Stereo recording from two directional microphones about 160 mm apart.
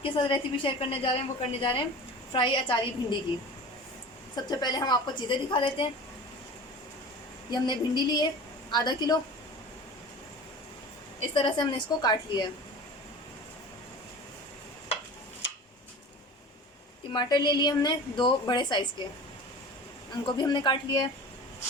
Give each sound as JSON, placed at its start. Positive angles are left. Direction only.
{"t": 0.0, "sound": "a woman's voice", "side_deg": 35}
{"t": 4.4, "sound": "a woman's voice", "side_deg": 25}
{"t": 7.5, "sound": "a woman's voice", "side_deg": 25}
{"t": 11.2, "sound": "a woman's voice", "side_deg": 30}
{"t": 17.1, "sound": "a woman's voice", "side_deg": 25}
{"t": 20.2, "sound": "a woman's voice", "side_deg": 25}